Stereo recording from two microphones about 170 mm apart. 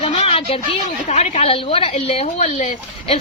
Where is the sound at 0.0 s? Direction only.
35° left (ahead or behind).